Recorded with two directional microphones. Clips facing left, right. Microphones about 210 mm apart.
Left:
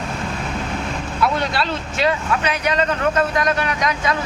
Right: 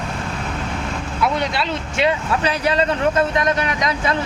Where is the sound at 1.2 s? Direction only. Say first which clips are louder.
Even; 20° right (ahead or behind).